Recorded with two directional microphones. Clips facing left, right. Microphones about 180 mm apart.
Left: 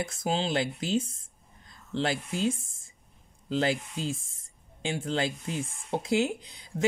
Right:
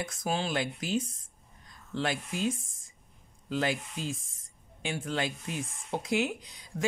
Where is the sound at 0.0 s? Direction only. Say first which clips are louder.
Left 3 dB; 25° left (ahead or behind).